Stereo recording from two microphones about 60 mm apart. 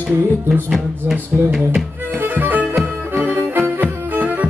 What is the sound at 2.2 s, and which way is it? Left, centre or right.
Music, right.